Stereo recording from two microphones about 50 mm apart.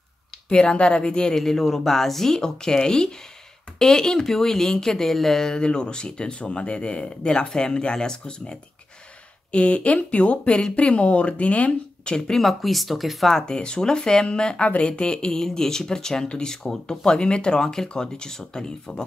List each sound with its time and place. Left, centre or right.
0.5 s speech: centre
12.4 s speech: centre
13.3 s speech: centre